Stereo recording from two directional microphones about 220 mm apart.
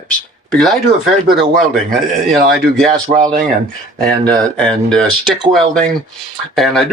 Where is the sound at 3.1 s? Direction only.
35° right (ahead or behind).